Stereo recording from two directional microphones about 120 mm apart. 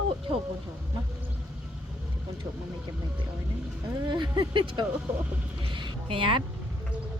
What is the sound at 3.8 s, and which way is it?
Speech, 30° right (ahead or behind).